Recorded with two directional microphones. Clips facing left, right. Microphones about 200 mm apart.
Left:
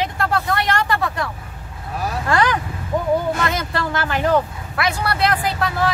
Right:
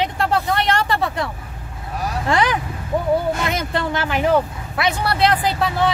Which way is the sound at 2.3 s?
15° right (ahead or behind).